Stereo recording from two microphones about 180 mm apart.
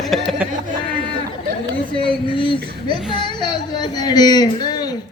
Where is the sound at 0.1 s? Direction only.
Centre (ahead or behind).